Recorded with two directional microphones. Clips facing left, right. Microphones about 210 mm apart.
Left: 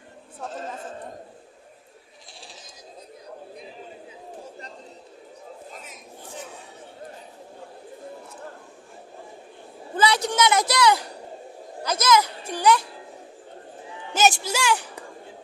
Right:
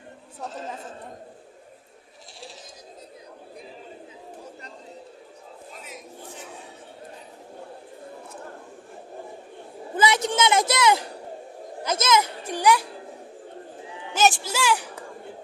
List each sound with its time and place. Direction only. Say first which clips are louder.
9.9 s a sound: even; 20° right (ahead or behind)
11.8 s a child's voice: left 1 dB; 25° right (ahead or behind)
14.1 s speech: left 1 dB; centre (ahead or behind)